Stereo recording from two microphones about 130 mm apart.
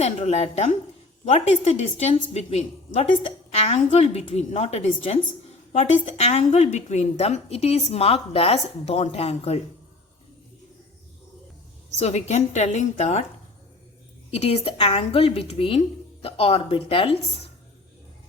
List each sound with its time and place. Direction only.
0.0 s a woman's voice: 55° left (ahead or behind)
11.9 s a woman's voice: 55° left (ahead or behind)
14.3 s a woman's voice: 55° left (ahead or behind)